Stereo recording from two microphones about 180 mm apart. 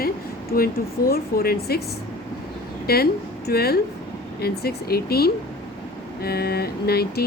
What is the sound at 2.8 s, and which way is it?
A woman's voice, 60° left (ahead or behind).